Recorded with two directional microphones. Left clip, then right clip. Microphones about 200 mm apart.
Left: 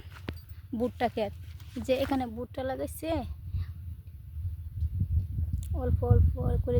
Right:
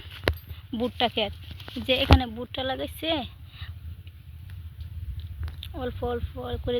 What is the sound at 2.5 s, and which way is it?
Speech, 10° left (ahead or behind).